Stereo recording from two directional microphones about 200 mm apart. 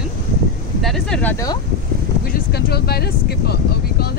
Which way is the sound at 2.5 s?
50° left (ahead or behind).